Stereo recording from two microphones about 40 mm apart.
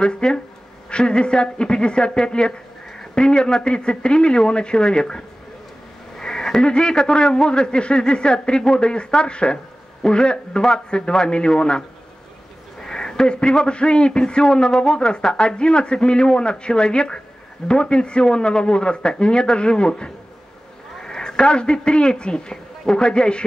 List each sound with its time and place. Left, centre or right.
0.0 s a man's voice: left
12.8 s a man's voice: centre